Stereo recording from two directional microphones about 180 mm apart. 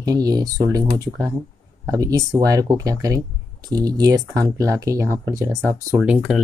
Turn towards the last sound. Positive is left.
turn(degrees=-5)  # may be behind; listen again after turning